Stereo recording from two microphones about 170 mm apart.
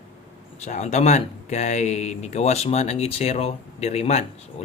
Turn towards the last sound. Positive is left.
turn(degrees=40)  # may be behind; listen again after turning